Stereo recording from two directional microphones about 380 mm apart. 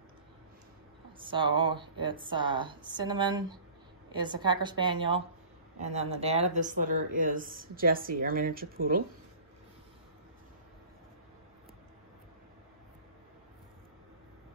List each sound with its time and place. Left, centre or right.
1.2 s speech: centre